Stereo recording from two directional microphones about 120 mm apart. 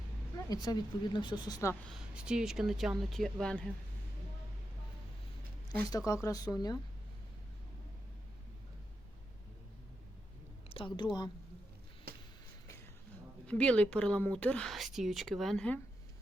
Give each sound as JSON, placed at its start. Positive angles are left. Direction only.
{"t": 0.3, "sound": "speech", "side_deg": 30}
{"t": 1.9, "sound": "speech", "side_deg": -5}
{"t": 6.2, "sound": "speech", "side_deg": 30}
{"t": 10.7, "sound": "a woman's voice", "side_deg": 45}
{"t": 13.5, "sound": "a woman's voice", "side_deg": 10}